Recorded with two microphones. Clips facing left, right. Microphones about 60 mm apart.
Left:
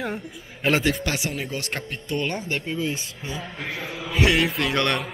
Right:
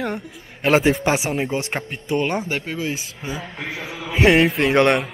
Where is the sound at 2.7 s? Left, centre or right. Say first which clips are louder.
Left 1 dB; centre.